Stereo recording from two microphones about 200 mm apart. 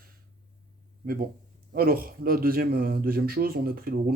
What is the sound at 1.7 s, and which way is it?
Speech, 45° right (ahead or behind).